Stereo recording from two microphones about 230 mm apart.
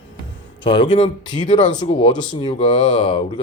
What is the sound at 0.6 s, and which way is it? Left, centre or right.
Speech, left.